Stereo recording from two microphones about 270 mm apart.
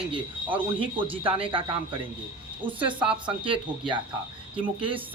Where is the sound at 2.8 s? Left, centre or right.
Centre.